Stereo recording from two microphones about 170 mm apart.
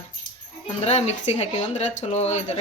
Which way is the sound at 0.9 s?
40° left (ahead or behind).